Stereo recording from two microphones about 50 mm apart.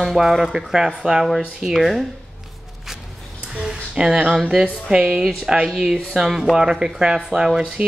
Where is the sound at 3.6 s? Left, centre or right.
Centre.